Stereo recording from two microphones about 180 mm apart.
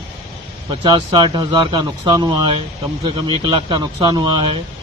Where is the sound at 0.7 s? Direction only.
30° right (ahead or behind).